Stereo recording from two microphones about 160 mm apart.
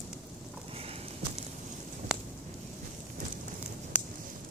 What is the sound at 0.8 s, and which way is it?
Clip-clop, 40° right (ahead or behind).